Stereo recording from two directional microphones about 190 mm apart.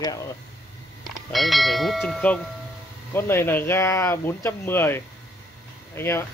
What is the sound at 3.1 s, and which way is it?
Speech, 15° left (ahead or behind).